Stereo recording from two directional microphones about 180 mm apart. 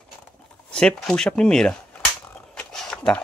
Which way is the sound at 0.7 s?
5° left (ahead or behind).